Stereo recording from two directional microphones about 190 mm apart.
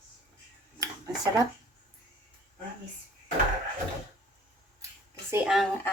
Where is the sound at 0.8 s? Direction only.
15° right (ahead or behind).